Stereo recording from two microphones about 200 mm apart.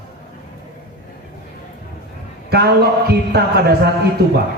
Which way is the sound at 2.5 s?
50° right (ahead or behind).